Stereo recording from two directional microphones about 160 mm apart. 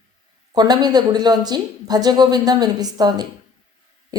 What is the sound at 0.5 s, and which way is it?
Speech, 25° right (ahead or behind).